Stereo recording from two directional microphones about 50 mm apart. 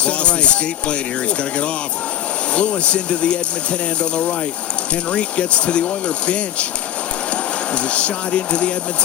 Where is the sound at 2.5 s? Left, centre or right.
Left.